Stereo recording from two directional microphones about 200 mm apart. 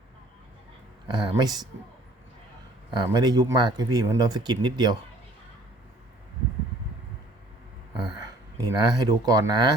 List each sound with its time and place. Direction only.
1.0 s speech: 20° right (ahead or behind)
2.9 s speech: 20° right (ahead or behind)
8.2 s speech: 20° right (ahead or behind)